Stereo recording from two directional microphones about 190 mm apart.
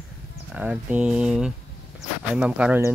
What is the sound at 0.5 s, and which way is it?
Speech, 5° right (ahead or behind).